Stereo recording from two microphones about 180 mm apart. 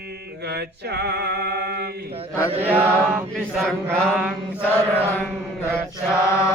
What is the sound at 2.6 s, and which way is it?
Mantra, 10° right (ahead or behind).